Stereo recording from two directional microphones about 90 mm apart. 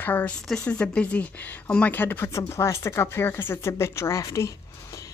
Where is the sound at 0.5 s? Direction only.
10° left (ahead or behind); by 4.5 s 35° left (ahead or behind).